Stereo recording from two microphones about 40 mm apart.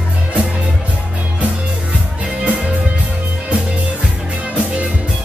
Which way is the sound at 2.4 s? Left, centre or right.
Right.